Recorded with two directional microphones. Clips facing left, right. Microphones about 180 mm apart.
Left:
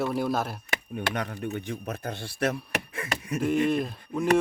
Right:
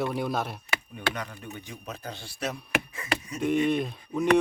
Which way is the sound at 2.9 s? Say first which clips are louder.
Left 1 dB; 55° left (ahead or behind).